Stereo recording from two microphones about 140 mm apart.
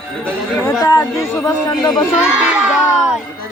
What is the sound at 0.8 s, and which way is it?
Speech, 25° left (ahead or behind).